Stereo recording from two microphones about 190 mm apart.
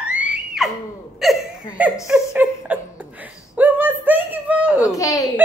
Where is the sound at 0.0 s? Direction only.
5° right (ahead or behind).